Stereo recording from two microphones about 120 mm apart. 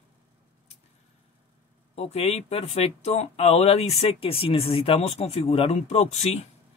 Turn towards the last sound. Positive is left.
turn(degrees=65)  # may be behind; listen again after turning